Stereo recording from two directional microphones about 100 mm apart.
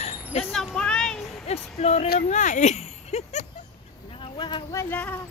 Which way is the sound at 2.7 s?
90° left.